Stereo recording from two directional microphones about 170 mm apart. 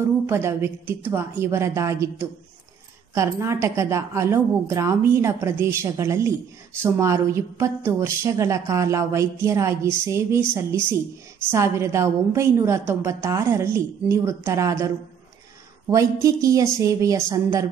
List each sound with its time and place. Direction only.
0.3 s a woman's voice: 15° right (ahead or behind)
15.9 s a woman's voice: 20° right (ahead or behind)